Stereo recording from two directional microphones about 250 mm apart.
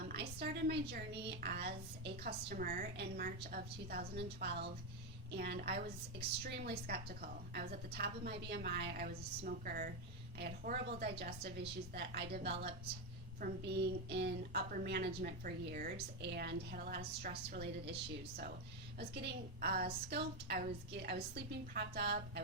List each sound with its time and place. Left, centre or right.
0.1 s a woman's voice: right
18.9 s a woman's voice: right